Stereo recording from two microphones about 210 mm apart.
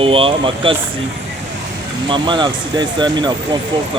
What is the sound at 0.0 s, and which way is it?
Speech, 25° right (ahead or behind).